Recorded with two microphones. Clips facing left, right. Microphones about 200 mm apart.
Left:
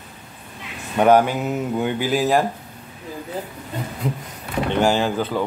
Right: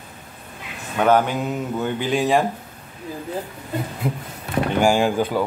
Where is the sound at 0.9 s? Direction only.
10° left (ahead or behind).